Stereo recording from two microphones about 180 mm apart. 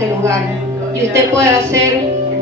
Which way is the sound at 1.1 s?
15° right (ahead or behind).